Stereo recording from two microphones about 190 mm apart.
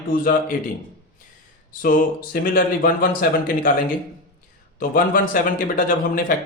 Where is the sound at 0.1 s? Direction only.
50° left (ahead or behind).